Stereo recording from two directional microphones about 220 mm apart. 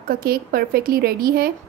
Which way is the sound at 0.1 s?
40° right (ahead or behind).